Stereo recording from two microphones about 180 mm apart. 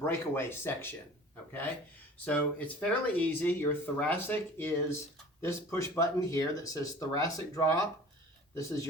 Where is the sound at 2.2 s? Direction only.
5° left (ahead or behind).